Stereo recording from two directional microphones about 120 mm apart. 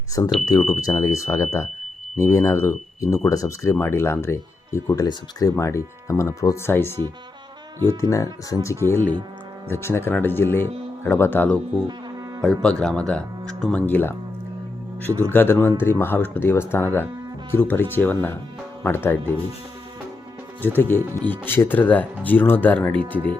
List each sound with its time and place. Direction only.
0.4 s speech: 30° left (ahead or behind)
12.6 s speech: 10° left (ahead or behind)
15.2 s speech: 15° left (ahead or behind)
20.6 s speech: 15° left (ahead or behind)